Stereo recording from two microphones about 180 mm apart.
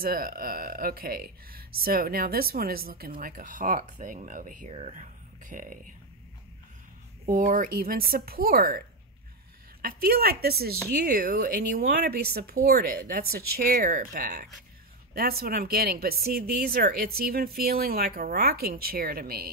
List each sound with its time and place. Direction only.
0.0 s speech: 55° right (ahead or behind)
7.2 s speech: 50° right (ahead or behind)